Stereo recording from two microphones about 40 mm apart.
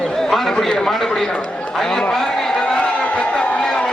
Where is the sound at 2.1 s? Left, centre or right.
Centre.